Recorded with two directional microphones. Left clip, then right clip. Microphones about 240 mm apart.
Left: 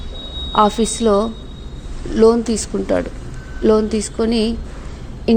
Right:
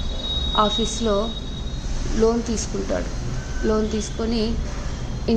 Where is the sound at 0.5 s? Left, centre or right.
Left.